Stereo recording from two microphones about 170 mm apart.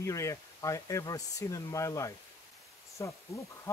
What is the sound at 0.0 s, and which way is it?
Speech, 20° left (ahead or behind).